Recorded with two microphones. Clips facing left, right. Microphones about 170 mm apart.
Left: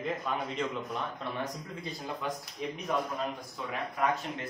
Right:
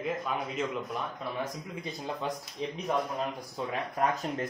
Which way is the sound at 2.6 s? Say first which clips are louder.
Right 2 dB; 30° right (ahead or behind).